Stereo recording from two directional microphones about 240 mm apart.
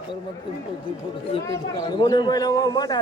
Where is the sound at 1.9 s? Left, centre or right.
Centre.